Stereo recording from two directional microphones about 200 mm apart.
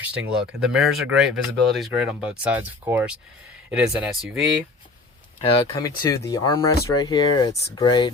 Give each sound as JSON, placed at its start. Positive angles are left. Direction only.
{"t": 0.0, "sound": "speech", "side_deg": -5}
{"t": 5.5, "sound": "speech", "side_deg": 20}